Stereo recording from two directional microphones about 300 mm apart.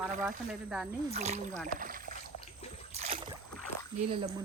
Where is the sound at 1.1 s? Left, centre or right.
Right.